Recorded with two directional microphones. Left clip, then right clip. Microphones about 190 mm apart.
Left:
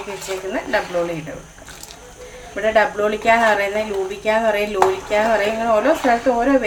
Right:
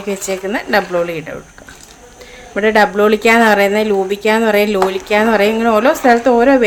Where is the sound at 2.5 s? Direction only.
60° right (ahead or behind).